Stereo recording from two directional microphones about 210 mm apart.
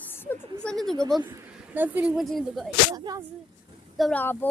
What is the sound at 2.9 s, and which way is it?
Speech, 20° right (ahead or behind).